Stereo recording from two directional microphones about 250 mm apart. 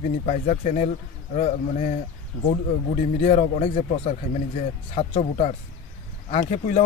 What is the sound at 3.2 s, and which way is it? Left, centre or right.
Speech, left.